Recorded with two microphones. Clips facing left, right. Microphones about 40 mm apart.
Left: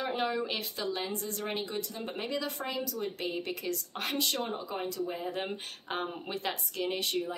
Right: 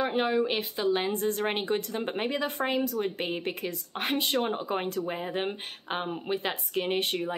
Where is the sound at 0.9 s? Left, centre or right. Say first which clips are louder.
Right 8 dB; right.